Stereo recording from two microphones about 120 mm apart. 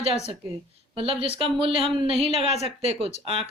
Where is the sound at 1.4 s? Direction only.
50° right (ahead or behind).